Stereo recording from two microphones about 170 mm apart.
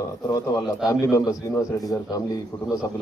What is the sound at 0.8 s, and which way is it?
A man's voice, 20° left (ahead or behind).